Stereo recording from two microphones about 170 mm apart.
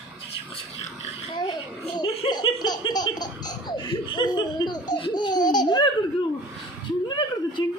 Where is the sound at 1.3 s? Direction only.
25° left (ahead or behind).